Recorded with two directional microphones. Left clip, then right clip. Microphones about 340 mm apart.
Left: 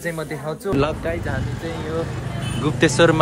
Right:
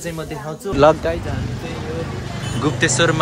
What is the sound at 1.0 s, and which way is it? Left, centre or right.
Speech, centre.